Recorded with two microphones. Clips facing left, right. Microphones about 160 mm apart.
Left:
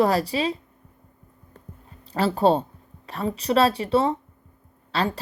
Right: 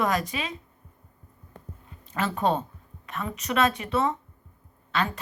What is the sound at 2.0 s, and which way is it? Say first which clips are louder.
Speech: left 6 dB; 35° left (ahead or behind).